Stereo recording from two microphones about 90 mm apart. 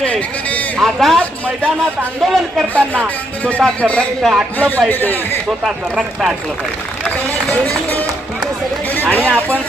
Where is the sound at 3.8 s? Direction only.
15° left (ahead or behind).